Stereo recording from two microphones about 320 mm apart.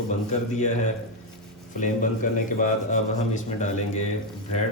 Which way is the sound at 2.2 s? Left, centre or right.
Left.